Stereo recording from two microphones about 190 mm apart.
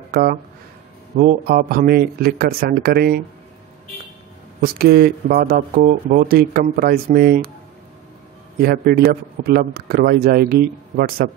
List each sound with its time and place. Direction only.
0.1 s speech: 50° right (ahead or behind)
1.4 s a man's voice: 55° right (ahead or behind)
4.6 s a man's voice: 55° right (ahead or behind)
8.5 s a man's voice: 55° right (ahead or behind)